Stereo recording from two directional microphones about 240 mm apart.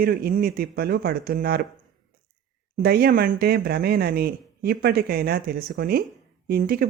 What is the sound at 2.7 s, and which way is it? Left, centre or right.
Speech, right.